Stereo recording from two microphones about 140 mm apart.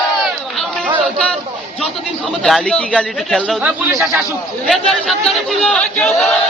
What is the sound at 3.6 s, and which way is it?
Speech, 10° right (ahead or behind).